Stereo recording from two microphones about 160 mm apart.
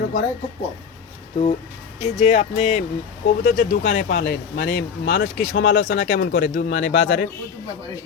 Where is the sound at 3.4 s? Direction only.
60° left (ahead or behind); by 7.2 s 90° left.